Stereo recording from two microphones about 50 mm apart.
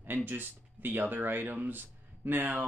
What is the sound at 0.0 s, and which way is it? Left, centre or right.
Speech, right.